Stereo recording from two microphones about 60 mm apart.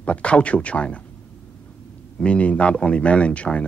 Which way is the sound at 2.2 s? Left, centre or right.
Centre.